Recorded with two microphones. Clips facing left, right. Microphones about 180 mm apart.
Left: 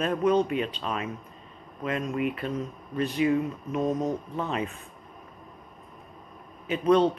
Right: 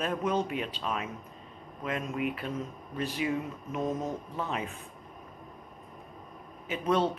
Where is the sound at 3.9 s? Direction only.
15° left (ahead or behind).